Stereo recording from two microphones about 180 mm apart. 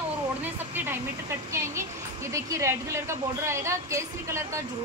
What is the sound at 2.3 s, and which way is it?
A woman's voice, 15° right (ahead or behind).